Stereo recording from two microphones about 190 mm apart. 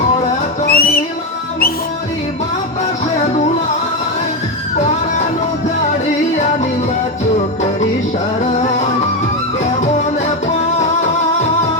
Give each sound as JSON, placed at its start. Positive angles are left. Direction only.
{"t": 0.7, "sound": "music", "side_deg": 50}